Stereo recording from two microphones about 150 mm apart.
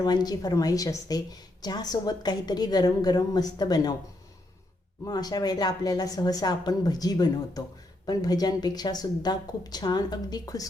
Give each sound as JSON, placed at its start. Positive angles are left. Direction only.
{"t": 0.0, "sound": "a woman's voice", "side_deg": 25}
{"t": 5.0, "sound": "a woman's voice", "side_deg": 25}